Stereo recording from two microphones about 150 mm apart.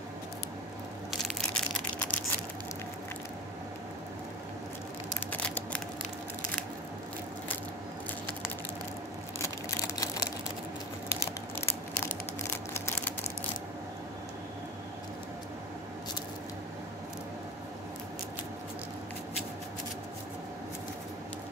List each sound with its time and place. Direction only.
1.1 s crushing: centre (ahead or behind)
5.3 s a sound: 10° left (ahead or behind)
9.7 s typing: 25° left (ahead or behind)